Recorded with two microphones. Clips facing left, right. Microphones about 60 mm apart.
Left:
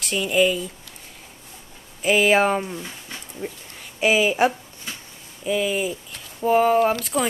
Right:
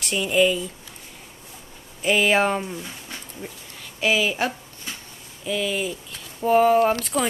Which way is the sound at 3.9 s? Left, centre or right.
Centre.